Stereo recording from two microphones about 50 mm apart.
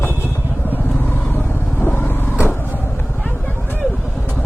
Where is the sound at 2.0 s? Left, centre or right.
Left.